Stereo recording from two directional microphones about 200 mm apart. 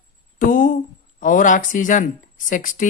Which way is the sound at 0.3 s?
40° left (ahead or behind).